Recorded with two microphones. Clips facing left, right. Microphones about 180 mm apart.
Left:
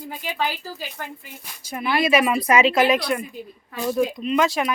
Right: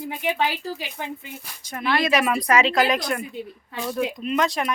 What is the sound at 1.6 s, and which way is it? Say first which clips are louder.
Speech: left 1 dB; 10° left (ahead or behind).